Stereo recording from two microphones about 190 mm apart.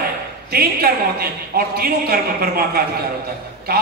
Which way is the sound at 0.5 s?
50° right (ahead or behind).